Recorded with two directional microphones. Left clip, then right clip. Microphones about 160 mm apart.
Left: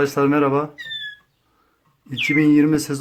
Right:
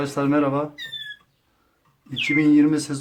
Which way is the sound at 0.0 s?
20° left (ahead or behind).